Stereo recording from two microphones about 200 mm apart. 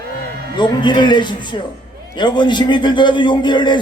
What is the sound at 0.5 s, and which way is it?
A man's voice, 25° left (ahead or behind).